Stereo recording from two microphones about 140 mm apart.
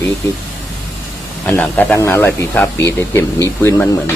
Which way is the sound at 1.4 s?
10° left (ahead or behind).